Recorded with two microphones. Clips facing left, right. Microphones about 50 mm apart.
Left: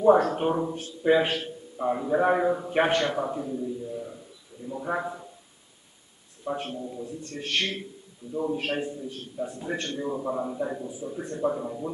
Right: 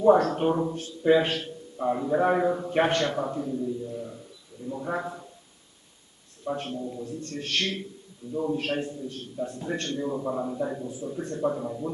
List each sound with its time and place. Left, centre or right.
0.0 s a man's voice: centre
6.4 s a man's voice: centre